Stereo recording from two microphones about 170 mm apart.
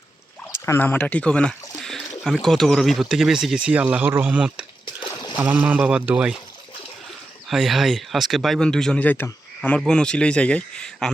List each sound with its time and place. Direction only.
0.5 s speech: 15° left (ahead or behind); by 4.6 s 5° right (ahead or behind)
5.0 s a sound: 25° left (ahead or behind)
5.4 s speech: 10° right (ahead or behind)
7.4 s speech: centre (ahead or behind)